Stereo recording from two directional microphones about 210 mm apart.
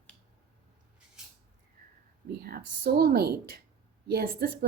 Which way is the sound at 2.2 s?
45° right (ahead or behind).